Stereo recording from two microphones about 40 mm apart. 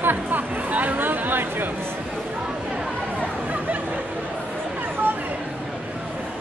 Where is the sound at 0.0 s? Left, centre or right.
Right.